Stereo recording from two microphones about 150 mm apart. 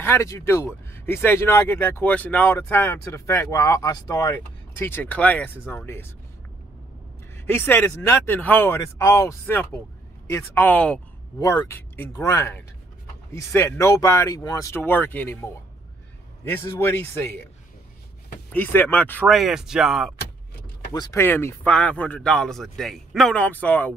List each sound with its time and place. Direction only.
0.0 s speech: 15° left (ahead or behind)
7.3 s speech: 15° left (ahead or behind)
11.3 s speech: 25° left (ahead or behind)
18.5 s speech: 10° left (ahead or behind)
19.2 s a man's voice: centre (ahead or behind)
20.9 s a man's voice: 25° left (ahead or behind)